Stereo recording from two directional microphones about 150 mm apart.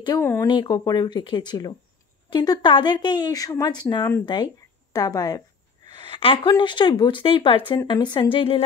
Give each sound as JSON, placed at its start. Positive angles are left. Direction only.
{"t": 0.2, "sound": "speech", "side_deg": 15}
{"t": 0.5, "sound": "speech", "side_deg": 30}